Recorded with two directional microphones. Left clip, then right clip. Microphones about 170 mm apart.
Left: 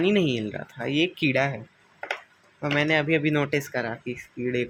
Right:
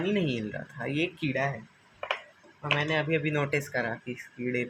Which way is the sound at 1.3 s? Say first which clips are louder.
Left 5 dB; 50° left (ahead or behind).